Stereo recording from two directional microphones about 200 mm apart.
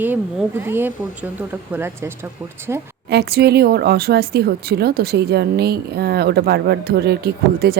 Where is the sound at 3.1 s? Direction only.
50° right (ahead or behind).